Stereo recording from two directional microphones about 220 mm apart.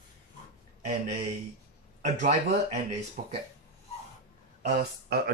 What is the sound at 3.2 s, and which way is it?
Speech, 40° right (ahead or behind).